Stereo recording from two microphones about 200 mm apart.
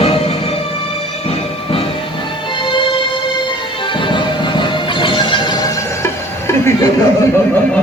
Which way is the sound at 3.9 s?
25° left (ahead or behind).